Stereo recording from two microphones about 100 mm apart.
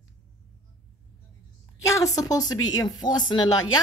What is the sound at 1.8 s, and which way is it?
Speech, 35° left (ahead or behind).